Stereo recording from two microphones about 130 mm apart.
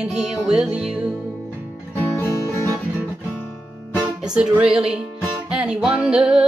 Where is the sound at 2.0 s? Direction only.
20° left (ahead or behind).